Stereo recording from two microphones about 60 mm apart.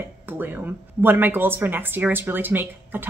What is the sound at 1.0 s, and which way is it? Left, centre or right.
Speech, right.